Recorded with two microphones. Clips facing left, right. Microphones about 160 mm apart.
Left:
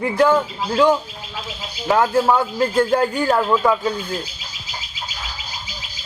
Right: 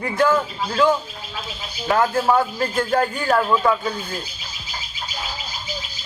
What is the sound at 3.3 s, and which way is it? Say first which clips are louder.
Speech: right 2 dB; 15° left (ahead or behind).